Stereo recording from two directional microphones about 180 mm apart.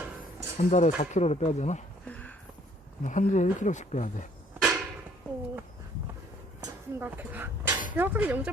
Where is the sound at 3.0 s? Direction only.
45° left (ahead or behind).